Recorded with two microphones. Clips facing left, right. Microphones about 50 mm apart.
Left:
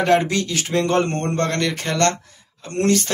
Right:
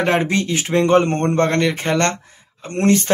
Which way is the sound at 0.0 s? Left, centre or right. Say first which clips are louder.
Even; right.